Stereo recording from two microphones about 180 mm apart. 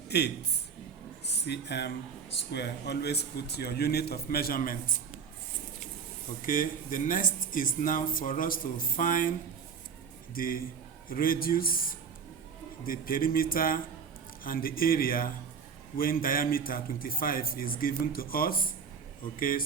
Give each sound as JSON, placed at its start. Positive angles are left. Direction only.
{"t": 0.1, "sound": "a man's voice", "side_deg": 65}
{"t": 1.5, "sound": "a man's voice", "side_deg": 70}
{"t": 6.4, "sound": "speech", "side_deg": 50}
{"t": 10.3, "sound": "speech", "side_deg": 55}